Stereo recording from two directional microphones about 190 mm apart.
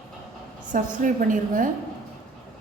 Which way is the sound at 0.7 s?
45° right (ahead or behind).